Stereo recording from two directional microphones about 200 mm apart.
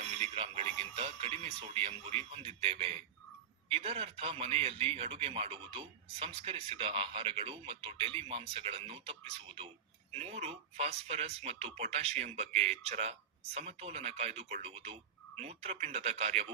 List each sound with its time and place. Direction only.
0.2 s speech: 30° right (ahead or behind)